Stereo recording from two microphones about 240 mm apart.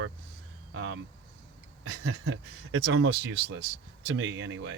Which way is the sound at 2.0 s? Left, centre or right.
Right.